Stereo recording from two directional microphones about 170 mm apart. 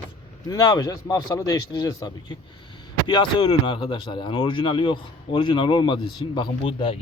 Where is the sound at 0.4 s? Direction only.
25° left (ahead or behind).